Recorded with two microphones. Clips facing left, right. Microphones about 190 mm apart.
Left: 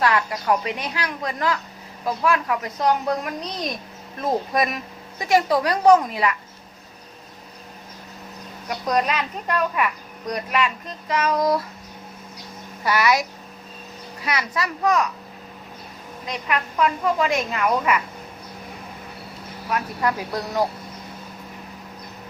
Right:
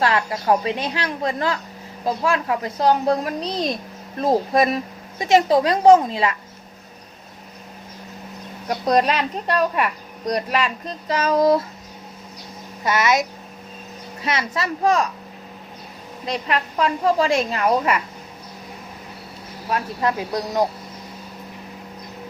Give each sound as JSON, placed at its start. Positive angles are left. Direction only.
{"t": 0.0, "sound": "a woman's voice", "side_deg": -30}
{"t": 8.8, "sound": "a woman's voice", "side_deg": -30}
{"t": 12.8, "sound": "speech", "side_deg": -20}
{"t": 14.3, "sound": "speech", "side_deg": -25}
{"t": 16.2, "sound": "a woman's voice", "side_deg": -30}
{"t": 19.7, "sound": "speech", "side_deg": -25}